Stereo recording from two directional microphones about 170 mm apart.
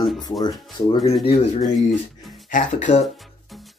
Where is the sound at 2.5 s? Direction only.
45° left (ahead or behind).